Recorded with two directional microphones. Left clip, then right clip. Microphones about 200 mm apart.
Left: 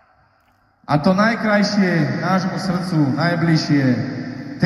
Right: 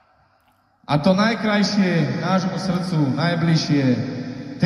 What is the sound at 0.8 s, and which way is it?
A man's voice, 25° right (ahead or behind).